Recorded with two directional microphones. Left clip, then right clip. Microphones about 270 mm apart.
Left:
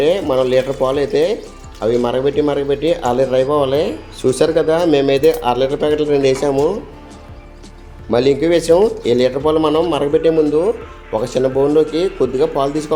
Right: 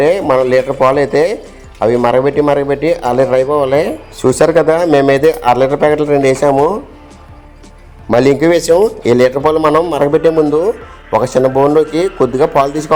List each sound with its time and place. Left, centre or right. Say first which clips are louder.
0.0 s a man's voice: right 4 dB; centre
8.1 s a man's voice: right 4 dB; right